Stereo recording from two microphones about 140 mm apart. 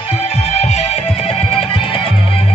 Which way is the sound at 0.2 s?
50° left (ahead or behind).